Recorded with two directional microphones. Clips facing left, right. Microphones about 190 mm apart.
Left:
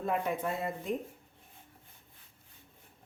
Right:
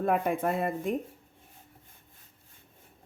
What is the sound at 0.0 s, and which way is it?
Speech, 55° right (ahead or behind).